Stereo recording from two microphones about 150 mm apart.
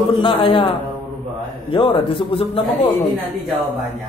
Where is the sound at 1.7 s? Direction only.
35° left (ahead or behind).